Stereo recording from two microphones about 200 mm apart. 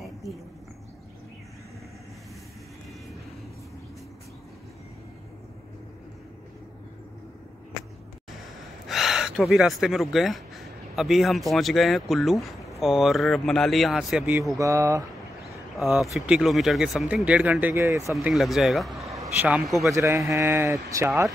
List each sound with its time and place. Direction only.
8.8 s speech: centre (ahead or behind)
14.6 s a man's voice: 15° right (ahead or behind)
15.8 s speech: centre (ahead or behind)
18.1 s speech: centre (ahead or behind)
19.9 s a man's voice: 15° right (ahead or behind)